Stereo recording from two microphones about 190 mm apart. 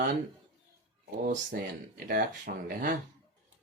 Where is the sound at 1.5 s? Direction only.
55° right (ahead or behind).